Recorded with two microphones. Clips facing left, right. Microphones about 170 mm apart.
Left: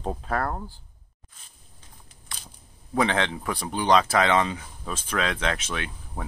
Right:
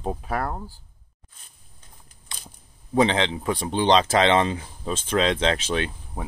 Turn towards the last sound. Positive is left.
turn(degrees=-15)  # may be behind; listen again after turning